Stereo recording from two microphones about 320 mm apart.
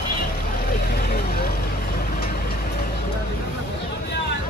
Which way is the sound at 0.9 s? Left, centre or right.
Left.